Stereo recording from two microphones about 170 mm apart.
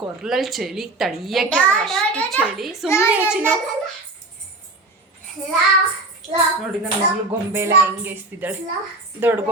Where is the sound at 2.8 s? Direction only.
15° left (ahead or behind).